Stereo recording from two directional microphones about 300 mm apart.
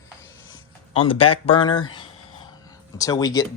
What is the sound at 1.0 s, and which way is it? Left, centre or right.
Speech, centre.